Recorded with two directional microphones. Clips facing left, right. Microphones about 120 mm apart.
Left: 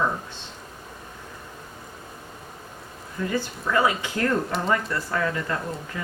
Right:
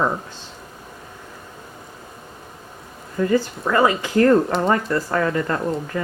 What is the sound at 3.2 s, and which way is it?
Speech, 45° right (ahead or behind).